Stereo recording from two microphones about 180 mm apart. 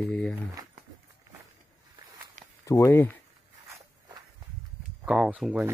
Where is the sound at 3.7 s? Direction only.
20° right (ahead or behind).